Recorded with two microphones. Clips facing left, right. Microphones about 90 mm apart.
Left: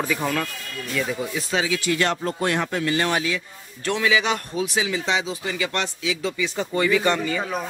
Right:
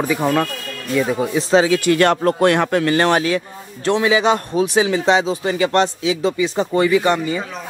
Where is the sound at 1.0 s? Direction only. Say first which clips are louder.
Right 7 dB; 55° right (ahead or behind).